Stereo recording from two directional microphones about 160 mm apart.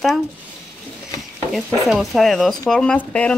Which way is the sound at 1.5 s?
Centre (ahead or behind).